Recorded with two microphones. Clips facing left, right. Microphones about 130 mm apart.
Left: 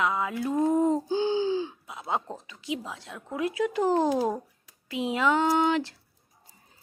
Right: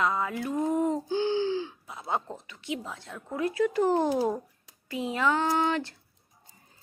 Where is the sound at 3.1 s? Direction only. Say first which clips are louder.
Even; 5° left (ahead or behind).